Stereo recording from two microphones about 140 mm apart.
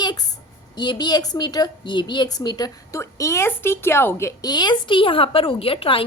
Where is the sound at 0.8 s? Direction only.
30° left (ahead or behind).